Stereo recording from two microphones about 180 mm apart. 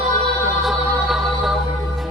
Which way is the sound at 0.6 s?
Centre (ahead or behind).